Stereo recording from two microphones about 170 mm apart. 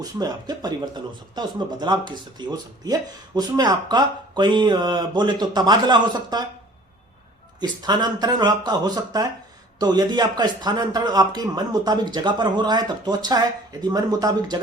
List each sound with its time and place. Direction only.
0.0 s speech: 20° right (ahead or behind)
7.6 s speech: 25° right (ahead or behind)